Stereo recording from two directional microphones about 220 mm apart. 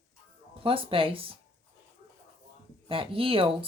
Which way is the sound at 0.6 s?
25° right (ahead or behind).